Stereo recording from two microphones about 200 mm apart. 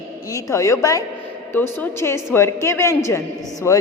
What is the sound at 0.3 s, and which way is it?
A woman's voice, 15° left (ahead or behind).